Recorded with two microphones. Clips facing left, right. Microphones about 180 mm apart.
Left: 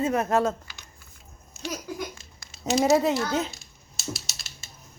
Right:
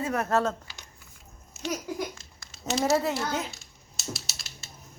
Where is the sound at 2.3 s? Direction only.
15° left (ahead or behind).